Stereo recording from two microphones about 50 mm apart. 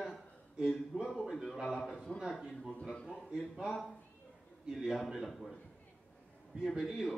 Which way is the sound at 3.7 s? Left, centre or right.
Centre.